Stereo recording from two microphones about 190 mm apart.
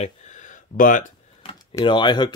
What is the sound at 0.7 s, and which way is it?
Speech, 45° left (ahead or behind).